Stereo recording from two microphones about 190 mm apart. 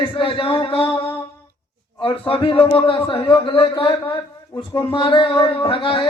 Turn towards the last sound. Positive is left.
turn(degrees=25)  # may be behind; listen again after turning